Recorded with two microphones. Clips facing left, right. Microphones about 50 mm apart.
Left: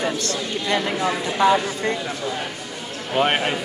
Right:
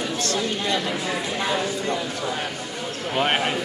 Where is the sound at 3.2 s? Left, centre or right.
Centre.